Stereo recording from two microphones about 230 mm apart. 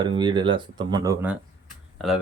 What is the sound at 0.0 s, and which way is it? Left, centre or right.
Speech, centre.